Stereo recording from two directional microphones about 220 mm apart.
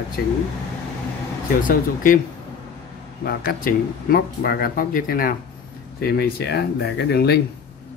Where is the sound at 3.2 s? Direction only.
45° left (ahead or behind).